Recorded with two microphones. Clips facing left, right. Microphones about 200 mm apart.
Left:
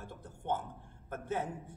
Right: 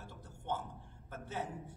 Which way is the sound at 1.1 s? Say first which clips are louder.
Left 5 dB; 55° left (ahead or behind).